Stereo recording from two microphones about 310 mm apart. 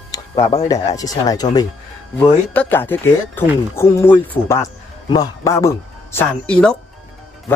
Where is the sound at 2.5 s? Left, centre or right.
Centre.